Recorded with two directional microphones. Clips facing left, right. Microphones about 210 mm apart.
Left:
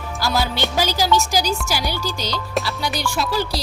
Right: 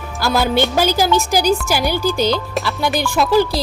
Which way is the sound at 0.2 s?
55° right (ahead or behind).